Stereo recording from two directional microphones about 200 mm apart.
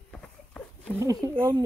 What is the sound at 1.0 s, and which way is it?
Speech, 15° right (ahead or behind).